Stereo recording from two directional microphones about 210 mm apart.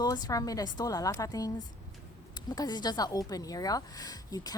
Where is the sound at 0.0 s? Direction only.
20° left (ahead or behind).